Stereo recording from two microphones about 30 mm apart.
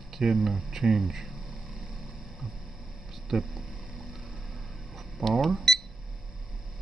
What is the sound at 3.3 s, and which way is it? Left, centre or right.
Speech, centre.